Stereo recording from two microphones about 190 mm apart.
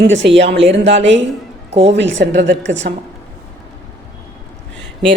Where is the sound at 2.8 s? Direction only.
50° right (ahead or behind).